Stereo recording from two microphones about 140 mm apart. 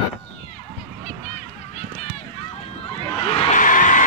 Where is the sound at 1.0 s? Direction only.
55° left (ahead or behind).